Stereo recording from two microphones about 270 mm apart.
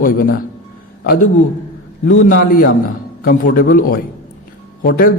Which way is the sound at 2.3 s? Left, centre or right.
Left.